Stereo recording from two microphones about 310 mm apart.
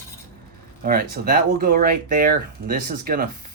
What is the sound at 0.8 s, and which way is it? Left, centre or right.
Speech, right.